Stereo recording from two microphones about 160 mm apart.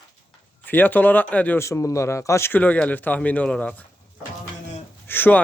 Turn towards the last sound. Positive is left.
turn(degrees=15)  # may be behind; listen again after turning